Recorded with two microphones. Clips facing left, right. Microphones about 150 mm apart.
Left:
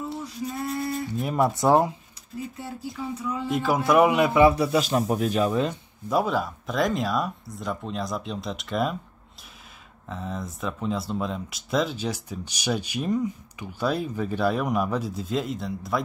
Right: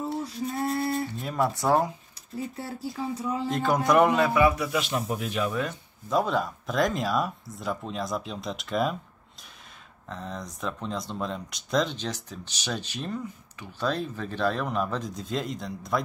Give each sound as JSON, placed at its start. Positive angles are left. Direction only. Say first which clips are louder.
{"t": 0.2, "sound": "a sound", "louder": "right 2 dB", "side_deg": -30}
{"t": 1.2, "sound": "speech", "louder": "left 6 dB", "side_deg": 20}
{"t": 2.3, "sound": "speech", "louder": "right 1 dB", "side_deg": -30}
{"t": 3.4, "sound": "speech", "louder": "left 2 dB", "side_deg": 5}
{"t": 4.2, "sound": "a man's voice", "louder": "left 4 dB", "side_deg": 25}
{"t": 6.0, "sound": "speech", "louder": "left 1 dB", "side_deg": 5}
{"t": 10.0, "sound": "speech", "louder": "left 3 dB", "side_deg": 5}